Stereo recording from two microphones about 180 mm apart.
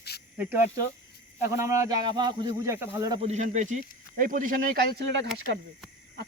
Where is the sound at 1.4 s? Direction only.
15° right (ahead or behind).